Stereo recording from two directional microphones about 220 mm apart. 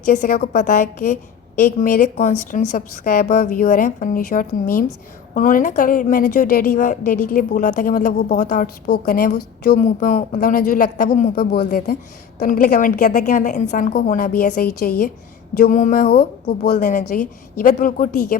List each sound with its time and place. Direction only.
0.0 s a woman's voice: 35° left (ahead or behind)